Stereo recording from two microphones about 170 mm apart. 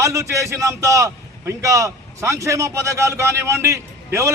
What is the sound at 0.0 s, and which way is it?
A man's voice, 15° right (ahead or behind).